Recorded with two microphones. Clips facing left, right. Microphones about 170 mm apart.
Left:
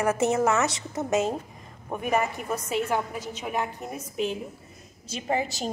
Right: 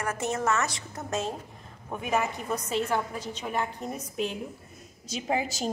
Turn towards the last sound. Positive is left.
turn(degrees=0)  # may be behind; listen again after turning